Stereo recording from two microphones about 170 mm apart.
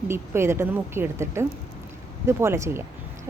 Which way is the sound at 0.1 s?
15° right (ahead or behind).